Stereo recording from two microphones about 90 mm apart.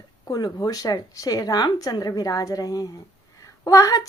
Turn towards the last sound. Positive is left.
turn(degrees=40)  # may be behind; listen again after turning